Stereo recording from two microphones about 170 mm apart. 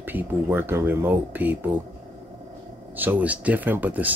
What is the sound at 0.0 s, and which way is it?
Speech, 10° right (ahead or behind).